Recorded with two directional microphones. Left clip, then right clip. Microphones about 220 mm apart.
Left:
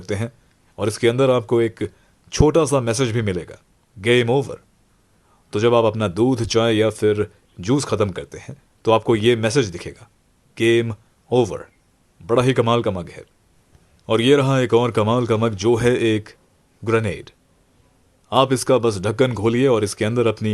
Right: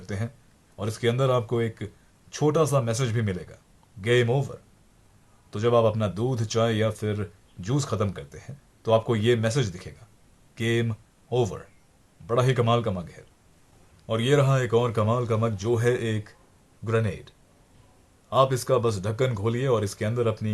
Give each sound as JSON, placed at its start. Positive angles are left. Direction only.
{"t": 0.0, "sound": "speech", "side_deg": 40}